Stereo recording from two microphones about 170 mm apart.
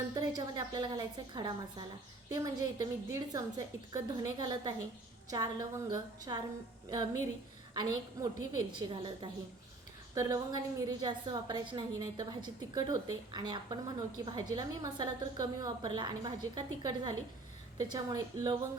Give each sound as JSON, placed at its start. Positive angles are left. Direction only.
{"t": 0.1, "sound": "a woman's voice", "side_deg": -25}